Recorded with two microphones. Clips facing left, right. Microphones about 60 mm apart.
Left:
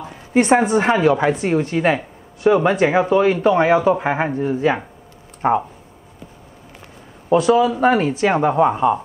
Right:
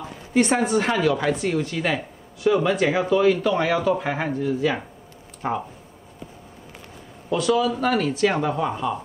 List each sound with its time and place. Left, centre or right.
0.3 s a woman's voice: left
7.2 s a man's voice: left